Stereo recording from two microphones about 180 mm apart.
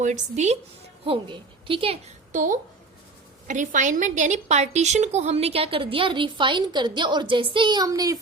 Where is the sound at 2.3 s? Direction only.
45° right (ahead or behind).